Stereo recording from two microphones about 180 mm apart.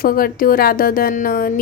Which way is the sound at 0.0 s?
55° left (ahead or behind).